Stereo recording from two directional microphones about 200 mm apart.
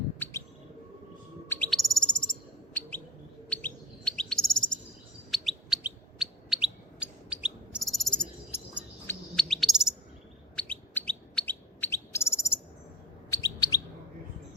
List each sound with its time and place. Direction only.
1.5 s bird: 5° left (ahead or behind)
3.5 s chirp: 5° left (ahead or behind)
5.3 s bird: centre (ahead or behind)
10.5 s chirp: 5° left (ahead or behind)